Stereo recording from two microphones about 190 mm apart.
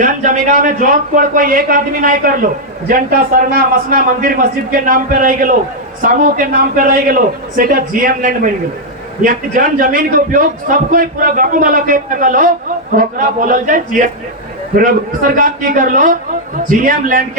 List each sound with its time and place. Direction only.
0.0 s a man's voice: 45° right (ahead or behind)
15.4 s a man's voice: 45° right (ahead or behind)